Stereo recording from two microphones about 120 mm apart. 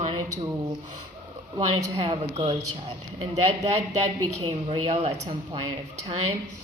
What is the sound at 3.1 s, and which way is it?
Speech, 65° right (ahead or behind).